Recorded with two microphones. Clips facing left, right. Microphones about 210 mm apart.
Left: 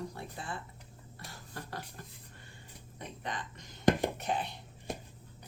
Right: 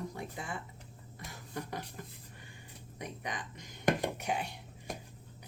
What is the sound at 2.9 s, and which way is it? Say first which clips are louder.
Speech: even; 15° right (ahead or behind).